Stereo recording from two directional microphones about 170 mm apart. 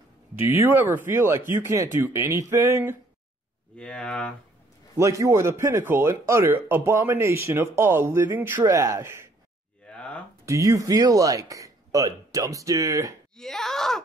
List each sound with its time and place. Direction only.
0.6 s a man's voice: 10° right (ahead or behind)
3.7 s speech: 5° left (ahead or behind)
4.9 s a man's voice: 20° right (ahead or behind)
9.8 s a sound: 5° left (ahead or behind)
10.4 s speech: 20° right (ahead or behind)
13.4 s speech: 5° left (ahead or behind)